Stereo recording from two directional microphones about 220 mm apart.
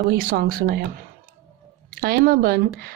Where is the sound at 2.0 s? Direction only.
40° right (ahead or behind).